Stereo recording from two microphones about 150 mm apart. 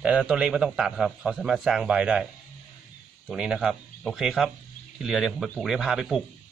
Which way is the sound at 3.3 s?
5° right (ahead or behind).